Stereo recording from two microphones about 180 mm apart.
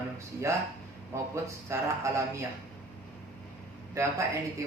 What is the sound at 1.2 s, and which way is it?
Speech, 15° right (ahead or behind).